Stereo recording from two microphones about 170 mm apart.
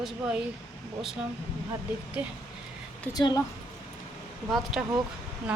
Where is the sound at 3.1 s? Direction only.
20° left (ahead or behind).